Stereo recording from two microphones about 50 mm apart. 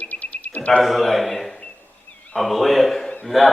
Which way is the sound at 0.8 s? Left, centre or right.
Centre.